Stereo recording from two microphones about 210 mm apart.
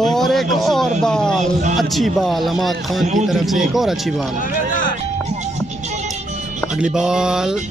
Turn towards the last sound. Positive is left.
turn(degrees=-5)  # may be behind; listen again after turning